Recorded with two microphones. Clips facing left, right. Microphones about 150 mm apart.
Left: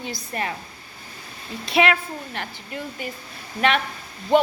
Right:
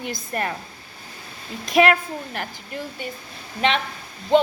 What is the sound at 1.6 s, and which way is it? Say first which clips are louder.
Speech: right 3 dB; 45° right (ahead or behind).